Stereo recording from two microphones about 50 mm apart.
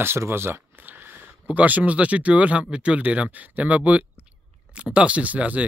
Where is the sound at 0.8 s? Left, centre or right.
Right.